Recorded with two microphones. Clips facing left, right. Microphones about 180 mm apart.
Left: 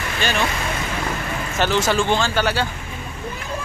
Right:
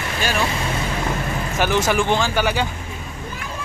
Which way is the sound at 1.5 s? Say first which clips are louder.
Even; 10° right (ahead or behind).